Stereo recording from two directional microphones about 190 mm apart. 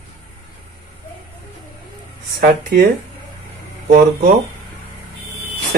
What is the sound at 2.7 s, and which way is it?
Speech, 55° right (ahead or behind).